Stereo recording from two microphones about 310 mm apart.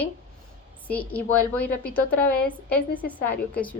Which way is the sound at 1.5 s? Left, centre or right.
Left.